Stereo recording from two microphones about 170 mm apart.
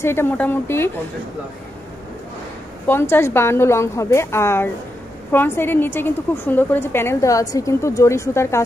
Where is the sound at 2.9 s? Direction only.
15° left (ahead or behind).